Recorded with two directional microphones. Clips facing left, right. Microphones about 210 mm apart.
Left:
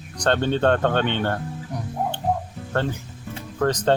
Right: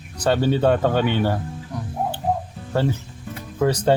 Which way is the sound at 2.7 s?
10° right (ahead or behind).